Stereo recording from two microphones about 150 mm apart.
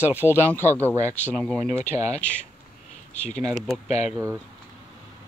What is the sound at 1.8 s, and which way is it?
Speech, 50° left (ahead or behind).